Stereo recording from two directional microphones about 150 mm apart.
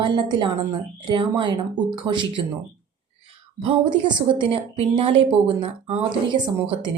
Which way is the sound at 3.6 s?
35° right (ahead or behind).